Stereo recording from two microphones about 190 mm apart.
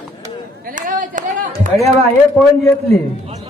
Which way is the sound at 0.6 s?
45° right (ahead or behind).